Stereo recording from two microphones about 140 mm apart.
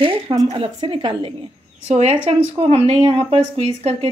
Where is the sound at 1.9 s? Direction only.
55° right (ahead or behind).